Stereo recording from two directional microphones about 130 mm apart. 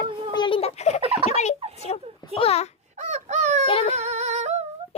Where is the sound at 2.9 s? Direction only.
65° right (ahead or behind).